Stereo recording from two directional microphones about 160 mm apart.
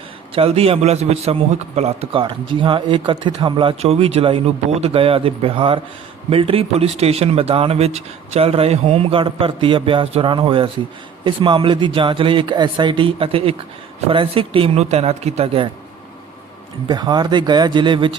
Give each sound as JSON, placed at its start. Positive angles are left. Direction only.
{"t": 0.3, "sound": "a man's voice", "side_deg": -35}
{"t": 16.9, "sound": "speech", "side_deg": -25}